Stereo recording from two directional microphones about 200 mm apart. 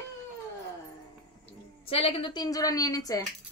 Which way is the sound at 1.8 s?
25° left (ahead or behind).